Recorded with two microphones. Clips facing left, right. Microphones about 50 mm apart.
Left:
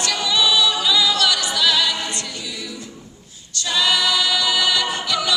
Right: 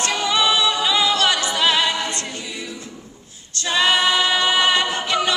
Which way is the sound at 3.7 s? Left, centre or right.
Right.